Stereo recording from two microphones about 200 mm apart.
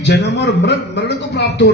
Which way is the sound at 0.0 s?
60° left (ahead or behind).